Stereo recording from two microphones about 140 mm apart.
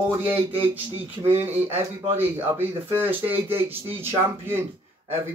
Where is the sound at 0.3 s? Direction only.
10° right (ahead or behind).